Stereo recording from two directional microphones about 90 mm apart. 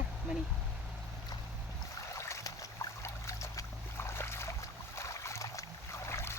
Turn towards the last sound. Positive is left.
turn(degrees=30)  # may be behind; listen again after turning